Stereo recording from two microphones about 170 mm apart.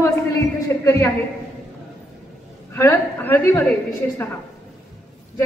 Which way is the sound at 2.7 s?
15° left (ahead or behind).